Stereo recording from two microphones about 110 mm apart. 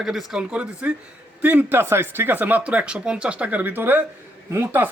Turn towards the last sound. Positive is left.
turn(degrees=-20)  # may be behind; listen again after turning